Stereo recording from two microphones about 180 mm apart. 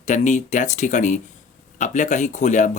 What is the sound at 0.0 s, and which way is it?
Speech, 45° left (ahead or behind).